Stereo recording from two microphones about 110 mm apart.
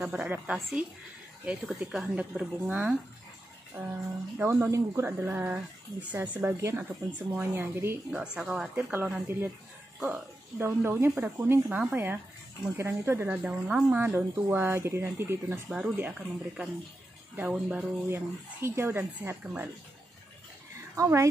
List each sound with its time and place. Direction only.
0.0 s speech: 10° right (ahead or behind)
6.5 s speech: 25° right (ahead or behind)
6.8 s speech: 15° right (ahead or behind)
8.1 s speech: 10° right (ahead or behind)
8.9 s speech: 20° right (ahead or behind)
10.6 s speech: 20° right (ahead or behind)
15.7 s speech: 10° right (ahead or behind)
18.1 s speech: 20° right (ahead or behind)
20.9 s speech: 30° right (ahead or behind)